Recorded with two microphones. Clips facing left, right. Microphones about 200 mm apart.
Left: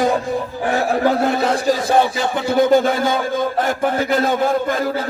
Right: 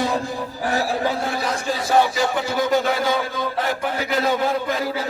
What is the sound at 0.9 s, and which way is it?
Speech, 60° left (ahead or behind).